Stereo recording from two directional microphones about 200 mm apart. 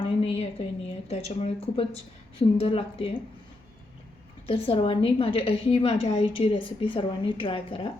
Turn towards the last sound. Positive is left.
turn(degrees=25)  # may be behind; listen again after turning